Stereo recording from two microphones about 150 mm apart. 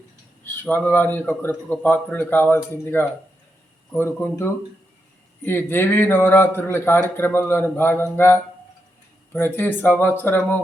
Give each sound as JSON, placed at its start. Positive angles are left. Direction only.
{"t": 0.4, "sound": "a man's voice", "side_deg": 15}